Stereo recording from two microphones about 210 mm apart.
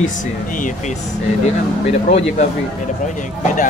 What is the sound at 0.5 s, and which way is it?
Speech, 40° left (ahead or behind).